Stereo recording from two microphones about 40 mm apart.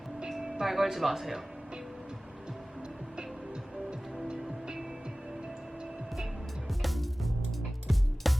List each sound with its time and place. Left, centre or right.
0.3 s vehicle: centre
0.6 s speech: centre
4.3 s music: centre
6.7 s music: centre